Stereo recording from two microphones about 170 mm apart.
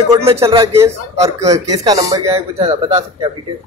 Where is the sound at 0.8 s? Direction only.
20° right (ahead or behind).